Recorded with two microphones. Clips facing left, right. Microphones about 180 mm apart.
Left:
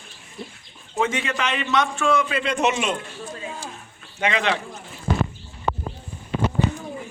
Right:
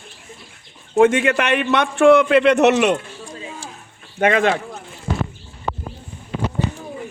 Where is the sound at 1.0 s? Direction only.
55° right (ahead or behind).